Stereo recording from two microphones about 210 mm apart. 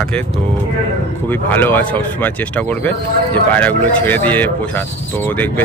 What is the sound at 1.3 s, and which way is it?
Speech, 10° left (ahead or behind).